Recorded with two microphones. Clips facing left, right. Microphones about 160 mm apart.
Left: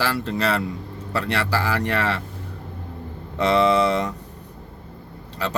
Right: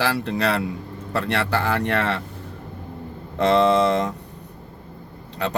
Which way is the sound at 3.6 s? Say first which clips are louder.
Even; 70° left (ahead or behind).